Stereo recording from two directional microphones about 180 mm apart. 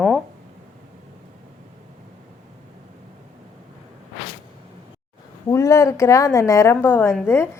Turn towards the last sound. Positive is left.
turn(degrees=15)  # may be behind; listen again after turning